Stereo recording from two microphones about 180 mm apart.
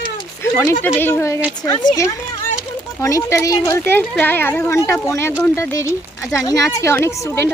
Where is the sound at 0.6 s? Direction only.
15° left (ahead or behind).